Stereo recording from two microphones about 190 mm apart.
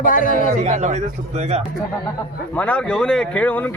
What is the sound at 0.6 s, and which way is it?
Speech, 35° right (ahead or behind).